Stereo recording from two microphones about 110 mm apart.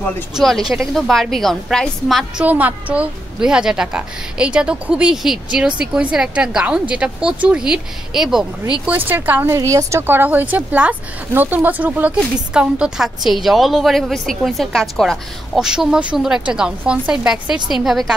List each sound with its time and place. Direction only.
0.3 s a woman's voice: centre (ahead or behind)
2.4 s a woman's voice: 15° right (ahead or behind)
8.8 s a woman's voice: 15° right (ahead or behind)
9.5 s a woman's voice: 30° right (ahead or behind); by 18.1 s 5° right (ahead or behind)